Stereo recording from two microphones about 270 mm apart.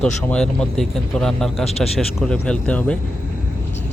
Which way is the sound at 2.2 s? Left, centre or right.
Centre.